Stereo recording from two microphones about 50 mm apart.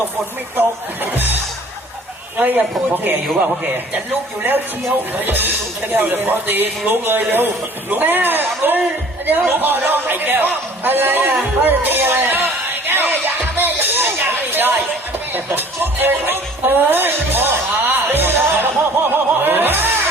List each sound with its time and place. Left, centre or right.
1.1 s a man's voice: right
2.9 s a man's voice: right
12.9 s music: right
14.5 s a sound: right
15.4 s music: right